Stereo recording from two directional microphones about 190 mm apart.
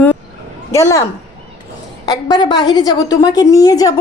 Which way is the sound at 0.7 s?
15° left (ahead or behind).